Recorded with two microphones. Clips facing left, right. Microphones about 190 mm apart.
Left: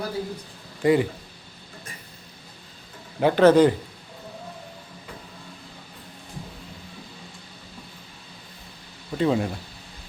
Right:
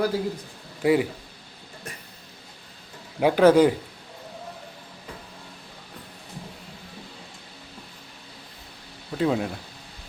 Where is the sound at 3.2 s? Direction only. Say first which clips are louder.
Left 1 dB; 10° right (ahead or behind).